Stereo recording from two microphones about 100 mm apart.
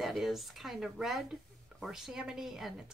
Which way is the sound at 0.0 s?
Centre (ahead or behind).